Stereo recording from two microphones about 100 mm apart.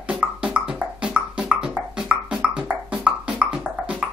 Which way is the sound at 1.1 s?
10° right (ahead or behind).